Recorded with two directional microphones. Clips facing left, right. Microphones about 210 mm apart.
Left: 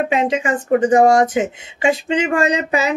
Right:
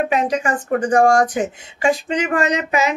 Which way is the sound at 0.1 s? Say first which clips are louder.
Left 1 dB; 25° left (ahead or behind).